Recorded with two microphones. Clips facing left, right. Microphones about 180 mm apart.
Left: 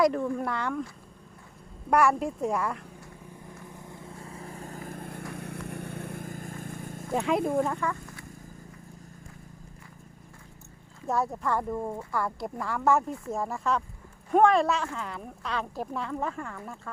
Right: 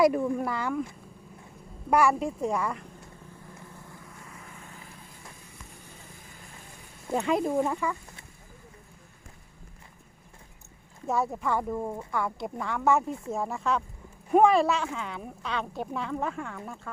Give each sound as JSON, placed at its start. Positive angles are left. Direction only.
{"t": 0.0, "sound": "a woman's voice", "side_deg": -10}
{"t": 1.9, "sound": "a woman's voice", "side_deg": 0}
{"t": 3.7, "sound": "vehicle", "side_deg": 20}
{"t": 7.1, "sound": "a woman's voice", "side_deg": 0}
{"t": 11.0, "sound": "a woman's voice", "side_deg": 0}